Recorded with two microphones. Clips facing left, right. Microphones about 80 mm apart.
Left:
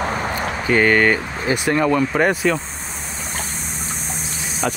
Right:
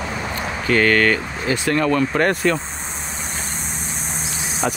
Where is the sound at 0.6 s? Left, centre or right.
Centre.